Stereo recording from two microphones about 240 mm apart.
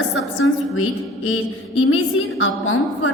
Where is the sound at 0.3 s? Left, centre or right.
Left.